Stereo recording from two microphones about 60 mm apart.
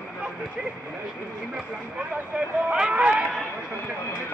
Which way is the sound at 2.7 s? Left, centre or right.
Centre.